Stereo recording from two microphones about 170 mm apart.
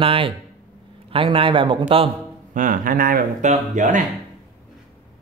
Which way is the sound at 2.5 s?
50° right (ahead or behind).